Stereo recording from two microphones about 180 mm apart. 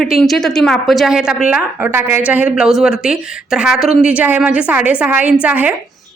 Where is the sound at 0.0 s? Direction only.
Centre (ahead or behind).